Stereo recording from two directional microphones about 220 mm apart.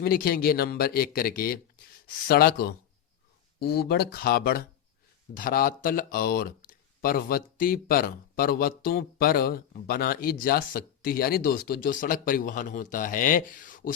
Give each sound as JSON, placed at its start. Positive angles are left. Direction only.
{"t": 0.0, "sound": "speech", "side_deg": 40}